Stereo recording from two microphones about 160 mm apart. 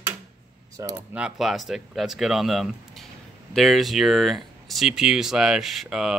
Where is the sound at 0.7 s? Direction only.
20° right (ahead or behind).